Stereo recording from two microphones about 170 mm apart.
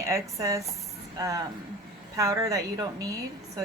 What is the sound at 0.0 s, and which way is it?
Speech, 20° right (ahead or behind).